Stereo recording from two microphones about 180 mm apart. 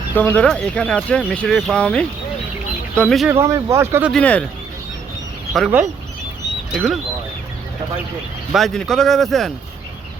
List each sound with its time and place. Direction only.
0.2 s speech: 10° left (ahead or behind)
3.2 s speech: 15° right (ahead or behind)
4.1 s speech: 5° left (ahead or behind)
5.5 s speech: 5° right (ahead or behind)
8.5 s speech: centre (ahead or behind)